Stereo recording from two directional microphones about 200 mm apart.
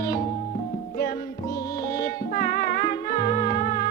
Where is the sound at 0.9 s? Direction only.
50° left (ahead or behind).